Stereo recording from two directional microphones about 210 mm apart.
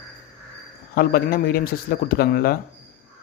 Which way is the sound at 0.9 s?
45° left (ahead or behind).